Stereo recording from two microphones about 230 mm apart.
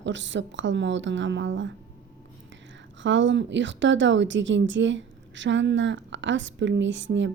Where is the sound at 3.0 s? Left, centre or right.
Right.